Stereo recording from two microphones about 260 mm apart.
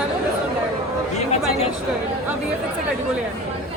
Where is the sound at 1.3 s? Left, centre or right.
Left.